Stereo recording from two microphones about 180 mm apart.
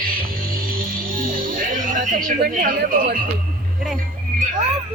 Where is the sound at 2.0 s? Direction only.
45° right (ahead or behind).